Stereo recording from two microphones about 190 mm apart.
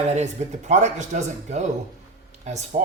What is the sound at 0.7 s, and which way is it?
Speech, 40° right (ahead or behind).